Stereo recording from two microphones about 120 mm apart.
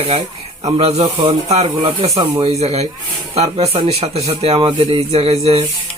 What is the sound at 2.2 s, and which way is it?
Speech, 45° right (ahead or behind).